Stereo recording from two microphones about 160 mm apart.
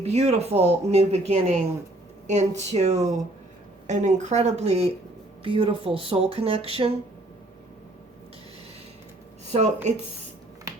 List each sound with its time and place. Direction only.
0.0 s speech: 40° right (ahead or behind)
9.5 s speech: 45° right (ahead or behind)